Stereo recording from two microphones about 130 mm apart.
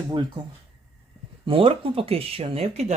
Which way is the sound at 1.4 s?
45° right (ahead or behind).